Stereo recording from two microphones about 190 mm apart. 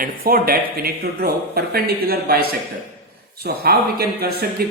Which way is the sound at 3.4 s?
55° right (ahead or behind).